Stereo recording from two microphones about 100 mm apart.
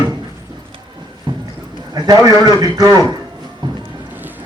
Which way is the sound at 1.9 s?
40° right (ahead or behind).